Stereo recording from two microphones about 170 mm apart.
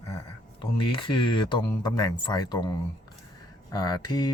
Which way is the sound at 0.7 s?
30° left (ahead or behind).